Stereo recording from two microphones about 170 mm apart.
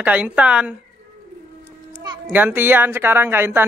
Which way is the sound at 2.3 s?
10° right (ahead or behind).